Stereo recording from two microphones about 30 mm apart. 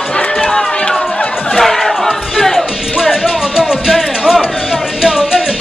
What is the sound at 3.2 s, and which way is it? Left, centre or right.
Music, centre.